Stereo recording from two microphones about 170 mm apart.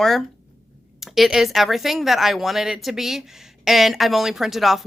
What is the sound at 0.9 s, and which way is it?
Speech, centre (ahead or behind).